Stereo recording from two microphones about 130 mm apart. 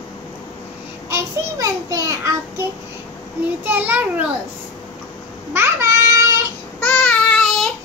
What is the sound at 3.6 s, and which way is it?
Speech, 15° right (ahead or behind).